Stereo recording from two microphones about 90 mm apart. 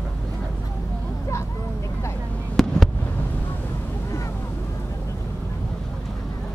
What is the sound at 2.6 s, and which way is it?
Fireworks, 5° left (ahead or behind).